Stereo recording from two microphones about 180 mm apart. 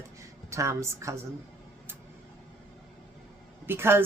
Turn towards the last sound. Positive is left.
turn(degrees=-10)  # may be behind; listen again after turning